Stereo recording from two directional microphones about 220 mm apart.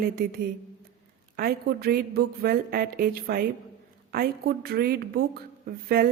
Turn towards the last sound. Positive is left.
turn(degrees=-45)  # may be behind; listen again after turning